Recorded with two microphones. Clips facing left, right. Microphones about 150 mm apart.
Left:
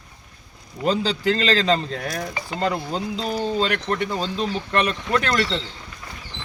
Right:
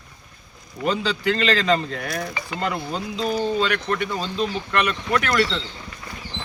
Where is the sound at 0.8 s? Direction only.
35° left (ahead or behind).